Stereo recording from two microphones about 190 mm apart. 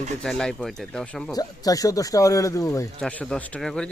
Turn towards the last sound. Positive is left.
turn(degrees=5)  # may be behind; listen again after turning